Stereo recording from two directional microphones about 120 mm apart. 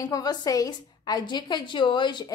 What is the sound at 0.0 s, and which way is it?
A woman's voice, 30° left (ahead or behind).